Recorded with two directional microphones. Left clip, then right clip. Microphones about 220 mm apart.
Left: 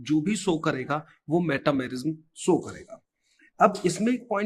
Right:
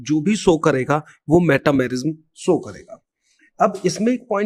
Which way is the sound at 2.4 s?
40° right (ahead or behind).